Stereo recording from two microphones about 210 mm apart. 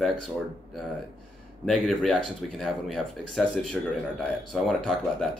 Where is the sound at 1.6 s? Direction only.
Centre (ahead or behind).